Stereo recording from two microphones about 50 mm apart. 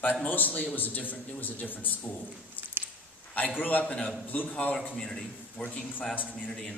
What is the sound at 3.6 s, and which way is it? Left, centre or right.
Speech, left.